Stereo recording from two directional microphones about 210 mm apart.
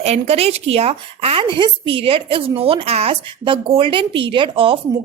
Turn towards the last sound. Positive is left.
turn(degrees=-25)  # may be behind; listen again after turning